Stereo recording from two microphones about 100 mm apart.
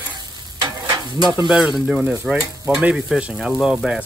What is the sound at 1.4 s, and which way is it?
Stir, 5° right (ahead or behind).